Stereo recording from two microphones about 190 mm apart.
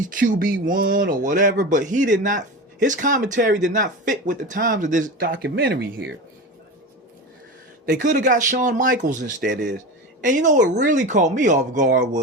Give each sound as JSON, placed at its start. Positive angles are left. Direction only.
{"t": 0.0, "sound": "speech", "side_deg": -45}
{"t": 5.2, "sound": "speech", "side_deg": -65}
{"t": 7.9, "sound": "speech", "side_deg": -45}
{"t": 9.5, "sound": "speech", "side_deg": -60}
{"t": 9.7, "sound": "speech", "side_deg": -45}